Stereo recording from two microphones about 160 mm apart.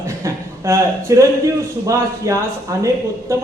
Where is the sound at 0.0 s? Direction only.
15° right (ahead or behind).